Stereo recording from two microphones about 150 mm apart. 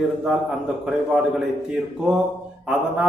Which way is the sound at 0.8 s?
5° right (ahead or behind).